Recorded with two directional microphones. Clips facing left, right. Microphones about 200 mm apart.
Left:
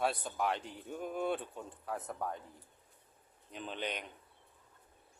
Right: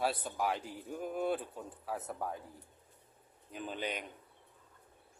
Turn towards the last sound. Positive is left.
turn(degrees=-5)  # may be behind; listen again after turning